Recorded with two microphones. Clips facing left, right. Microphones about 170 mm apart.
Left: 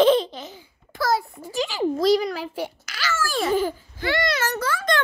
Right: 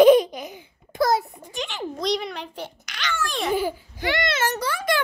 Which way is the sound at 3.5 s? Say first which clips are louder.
Left 2 dB; 15° right (ahead or behind).